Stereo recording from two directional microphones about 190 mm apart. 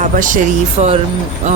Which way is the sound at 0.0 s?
45° right (ahead or behind).